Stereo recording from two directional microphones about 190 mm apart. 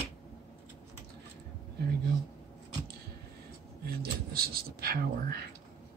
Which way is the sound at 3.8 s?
50° right (ahead or behind).